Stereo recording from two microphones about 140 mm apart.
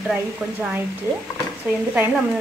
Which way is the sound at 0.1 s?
10° right (ahead or behind).